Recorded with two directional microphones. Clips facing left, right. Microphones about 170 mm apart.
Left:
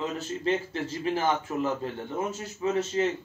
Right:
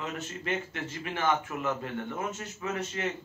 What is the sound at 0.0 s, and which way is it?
A man's voice, 30° left (ahead or behind).